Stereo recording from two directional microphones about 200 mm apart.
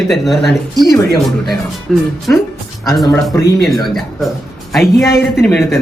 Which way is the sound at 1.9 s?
Centre (ahead or behind).